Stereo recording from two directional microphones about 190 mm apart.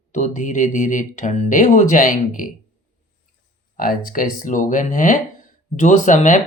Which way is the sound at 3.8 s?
45° left (ahead or behind).